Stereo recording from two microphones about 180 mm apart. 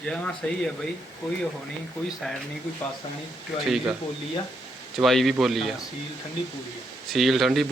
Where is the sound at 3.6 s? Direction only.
Centre (ahead or behind).